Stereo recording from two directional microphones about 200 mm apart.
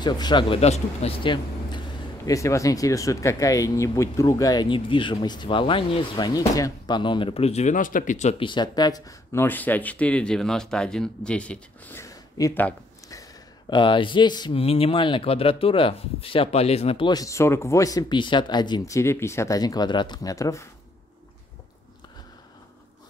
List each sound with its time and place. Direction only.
0.0 s speech: 20° left (ahead or behind)